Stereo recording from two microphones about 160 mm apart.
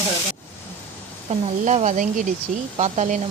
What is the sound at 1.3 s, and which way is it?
Speech, 50° right (ahead or behind).